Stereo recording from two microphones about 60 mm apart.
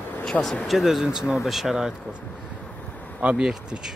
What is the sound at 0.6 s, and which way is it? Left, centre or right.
Speech, centre.